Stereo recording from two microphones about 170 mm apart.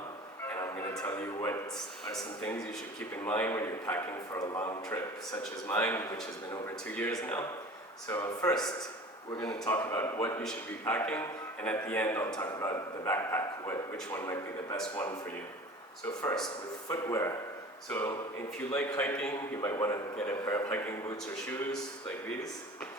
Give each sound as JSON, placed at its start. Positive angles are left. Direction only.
{"t": 0.5, "sound": "music", "side_deg": 15}
{"t": 1.0, "sound": "a man's voice", "side_deg": 15}
{"t": 16.9, "sound": "a man's voice", "side_deg": 20}
{"t": 19.6, "sound": "a man's voice", "side_deg": 20}